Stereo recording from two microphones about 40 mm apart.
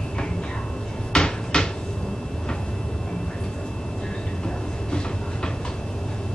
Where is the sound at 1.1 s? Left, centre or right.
Left.